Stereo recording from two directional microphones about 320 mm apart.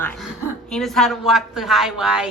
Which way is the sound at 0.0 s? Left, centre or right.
Centre.